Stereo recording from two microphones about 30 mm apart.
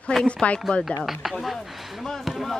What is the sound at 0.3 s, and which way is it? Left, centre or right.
Speech, left.